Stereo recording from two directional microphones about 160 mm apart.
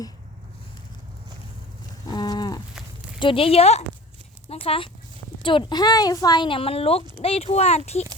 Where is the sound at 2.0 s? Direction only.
25° left (ahead or behind).